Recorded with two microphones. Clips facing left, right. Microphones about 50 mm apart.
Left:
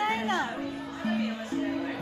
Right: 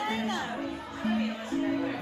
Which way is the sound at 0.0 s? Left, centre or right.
Left.